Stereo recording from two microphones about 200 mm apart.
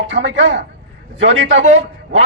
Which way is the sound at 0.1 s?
70° right (ahead or behind).